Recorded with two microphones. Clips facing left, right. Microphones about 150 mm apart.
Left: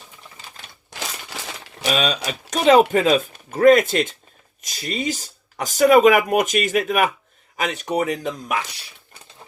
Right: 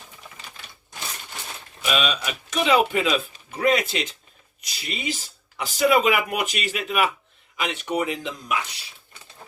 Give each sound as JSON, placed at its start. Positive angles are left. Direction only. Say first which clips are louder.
{"t": 0.9, "sound": "crumpling", "louder": "left 4 dB", "side_deg": 90}
{"t": 1.9, "sound": "speech", "louder": "left 3 dB", "side_deg": 35}